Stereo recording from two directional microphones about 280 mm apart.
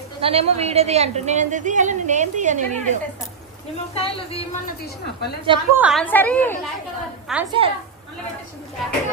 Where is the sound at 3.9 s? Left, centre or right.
Left.